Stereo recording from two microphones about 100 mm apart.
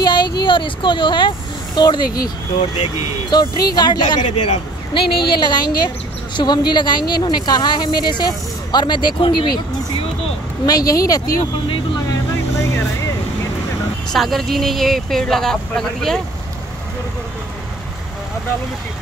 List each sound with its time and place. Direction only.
0.0 s a sound: 45° left (ahead or behind)
1.8 s speech: 45° left (ahead or behind)
10.6 s speech: 40° left (ahead or behind)
12.5 s vehicle: 30° left (ahead or behind)
14.1 s speech: centre (ahead or behind)